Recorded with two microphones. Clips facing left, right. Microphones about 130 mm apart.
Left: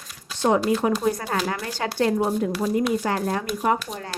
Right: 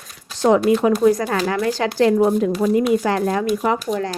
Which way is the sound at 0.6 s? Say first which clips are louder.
Right 6 dB; 85° right.